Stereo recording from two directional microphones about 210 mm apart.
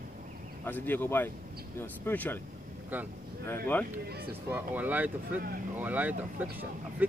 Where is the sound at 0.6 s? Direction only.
10° left (ahead or behind).